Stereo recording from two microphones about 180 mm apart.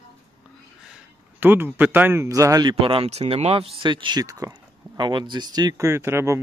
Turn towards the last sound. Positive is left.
turn(degrees=-15)  # may be behind; listen again after turning